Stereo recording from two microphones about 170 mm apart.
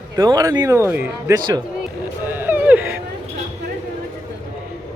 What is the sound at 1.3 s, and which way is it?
Speech, 25° right (ahead or behind).